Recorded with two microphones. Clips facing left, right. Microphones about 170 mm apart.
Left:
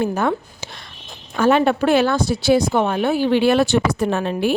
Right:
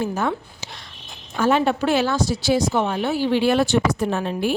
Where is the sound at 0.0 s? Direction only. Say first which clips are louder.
Left 4 dB; 60° left (ahead or behind).